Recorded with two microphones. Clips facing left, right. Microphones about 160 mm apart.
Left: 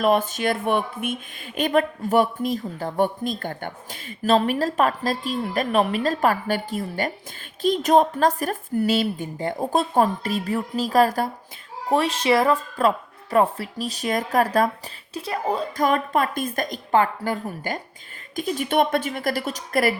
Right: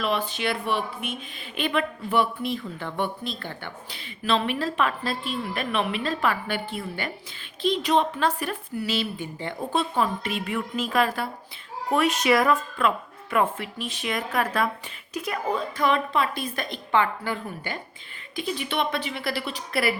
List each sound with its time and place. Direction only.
0.0 s a woman's voice: 45° left (ahead or behind)
11.9 s a woman's voice: 30° left (ahead or behind)